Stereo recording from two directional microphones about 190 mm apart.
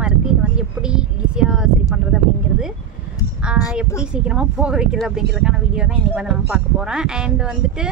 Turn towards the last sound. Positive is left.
turn(degrees=-5)  # may be behind; listen again after turning